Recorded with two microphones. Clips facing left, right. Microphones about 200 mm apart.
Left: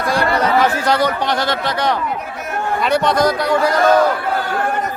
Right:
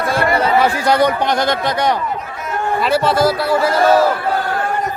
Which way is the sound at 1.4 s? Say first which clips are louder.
Right 2 dB; 15° right (ahead or behind).